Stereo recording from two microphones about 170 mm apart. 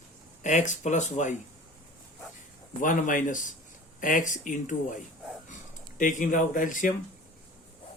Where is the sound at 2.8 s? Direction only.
50° left (ahead or behind).